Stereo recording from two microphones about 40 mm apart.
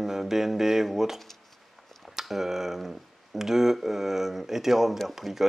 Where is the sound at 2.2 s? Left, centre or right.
Centre.